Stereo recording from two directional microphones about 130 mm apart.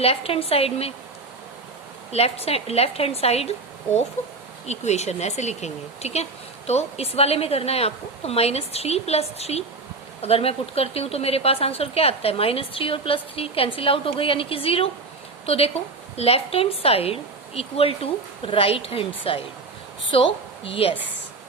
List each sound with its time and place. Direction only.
0.0 s speech: 50° left (ahead or behind)
2.1 s speech: 50° left (ahead or behind)
4.6 s speech: 60° left (ahead or behind)